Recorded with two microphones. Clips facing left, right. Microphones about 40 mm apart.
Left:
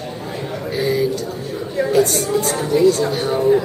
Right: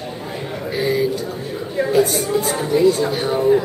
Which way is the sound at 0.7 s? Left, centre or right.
Centre.